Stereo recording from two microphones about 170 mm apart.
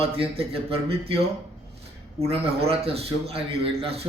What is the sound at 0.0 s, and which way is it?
Speech, 35° right (ahead or behind).